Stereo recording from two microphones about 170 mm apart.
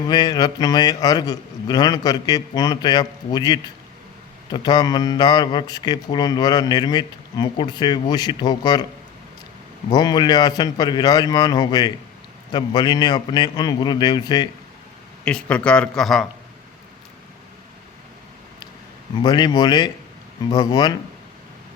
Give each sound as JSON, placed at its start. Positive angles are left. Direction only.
{"t": 0.1, "sound": "a man's voice", "side_deg": 25}
{"t": 9.9, "sound": "a man's voice", "side_deg": 25}
{"t": 15.2, "sound": "speech", "side_deg": 5}
{"t": 19.2, "sound": "a man's voice", "side_deg": 25}